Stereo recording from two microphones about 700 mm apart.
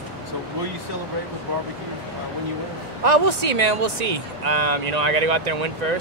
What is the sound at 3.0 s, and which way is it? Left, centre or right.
Speech, right.